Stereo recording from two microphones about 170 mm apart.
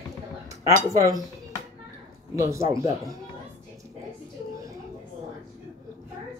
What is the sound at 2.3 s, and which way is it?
Speech, 15° right (ahead or behind).